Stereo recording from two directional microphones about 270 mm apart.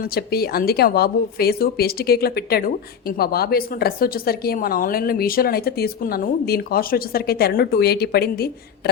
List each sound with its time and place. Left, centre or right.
0.0 s a woman's voice: left